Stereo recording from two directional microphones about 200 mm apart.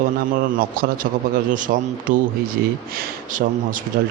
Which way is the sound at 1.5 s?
40° right (ahead or behind).